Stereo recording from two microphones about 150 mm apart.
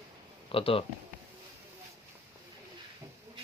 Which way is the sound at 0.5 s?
40° left (ahead or behind).